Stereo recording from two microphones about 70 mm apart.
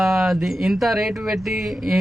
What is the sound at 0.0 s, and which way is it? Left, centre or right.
Speech, centre.